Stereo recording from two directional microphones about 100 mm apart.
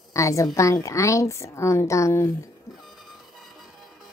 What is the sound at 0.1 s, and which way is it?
A woman's voice, 30° left (ahead or behind).